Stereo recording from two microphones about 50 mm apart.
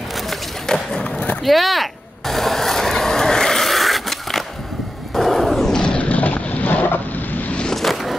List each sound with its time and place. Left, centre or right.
0.3 s skateboard: centre
1.4 s vehicle: centre
5.1 s a sound: centre
5.7 s a sound: centre
5.9 s boat: left
7.7 s vehicle: centre